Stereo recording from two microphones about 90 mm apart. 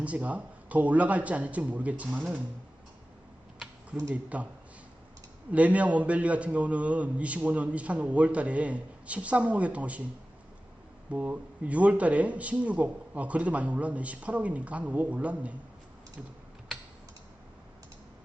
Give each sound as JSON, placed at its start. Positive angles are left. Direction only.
{"t": 0.0, "sound": "a man's voice", "side_deg": -15}
{"t": 4.1, "sound": "a man's voice", "side_deg": -15}
{"t": 5.5, "sound": "a man's voice", "side_deg": -15}
{"t": 11.1, "sound": "a man's voice", "side_deg": -15}